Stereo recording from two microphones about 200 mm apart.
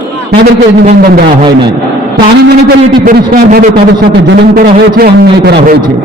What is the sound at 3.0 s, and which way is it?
A man's voice, 50° right (ahead or behind).